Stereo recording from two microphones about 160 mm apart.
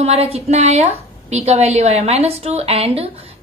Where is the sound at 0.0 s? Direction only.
40° right (ahead or behind).